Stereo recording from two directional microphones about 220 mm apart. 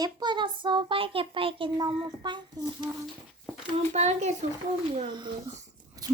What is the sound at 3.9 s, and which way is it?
Speech, 30° right (ahead or behind).